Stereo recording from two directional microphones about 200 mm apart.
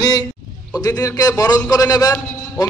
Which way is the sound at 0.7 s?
15° left (ahead or behind).